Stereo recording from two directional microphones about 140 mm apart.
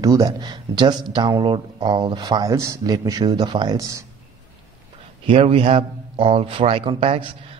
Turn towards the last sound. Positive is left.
turn(degrees=-40)  # may be behind; listen again after turning